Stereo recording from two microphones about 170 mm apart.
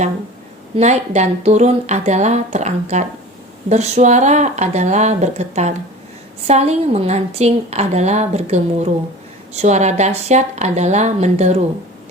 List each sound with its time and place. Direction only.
0.8 s a woman's voice: 40° right (ahead or behind)